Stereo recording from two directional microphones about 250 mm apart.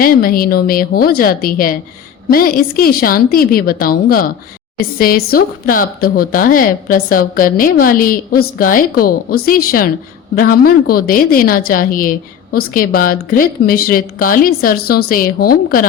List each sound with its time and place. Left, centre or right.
0.0 s a woman's voice: left